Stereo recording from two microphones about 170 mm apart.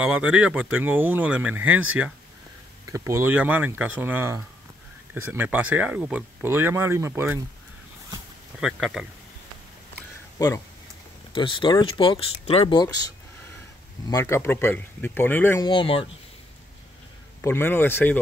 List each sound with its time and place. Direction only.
0.0 s speech: 5° right (ahead or behind)
8.5 s speech: 5° right (ahead or behind)
11.3 s speech: 30° left (ahead or behind)
14.1 s speech: 15° left (ahead or behind)
15.6 s speech: 30° left (ahead or behind)
17.4 s speech: 15° left (ahead or behind)